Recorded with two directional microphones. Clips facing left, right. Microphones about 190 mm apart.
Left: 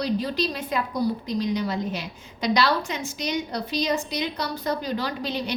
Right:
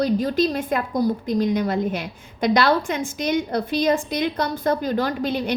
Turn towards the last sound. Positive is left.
turn(degrees=-50)  # may be behind; listen again after turning